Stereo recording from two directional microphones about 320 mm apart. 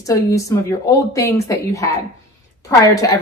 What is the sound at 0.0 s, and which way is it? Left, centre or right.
A woman's voice, centre.